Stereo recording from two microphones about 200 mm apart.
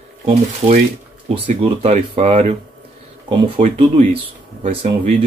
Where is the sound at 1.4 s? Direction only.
40° right (ahead or behind).